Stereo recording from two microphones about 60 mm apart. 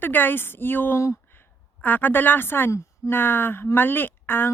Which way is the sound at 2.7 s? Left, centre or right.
Left.